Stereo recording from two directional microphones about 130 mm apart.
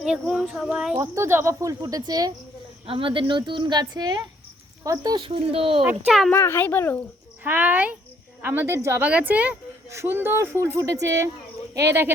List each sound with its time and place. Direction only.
0.0 s speech: 5° right (ahead or behind)
0.9 s speech: 25° right (ahead or behind)
2.8 s a woman's voice: 45° right (ahead or behind)
6.1 s speech: centre (ahead or behind)
6.3 s a child's voice: 20° left (ahead or behind)
7.4 s a woman's voice: 15° right (ahead or behind)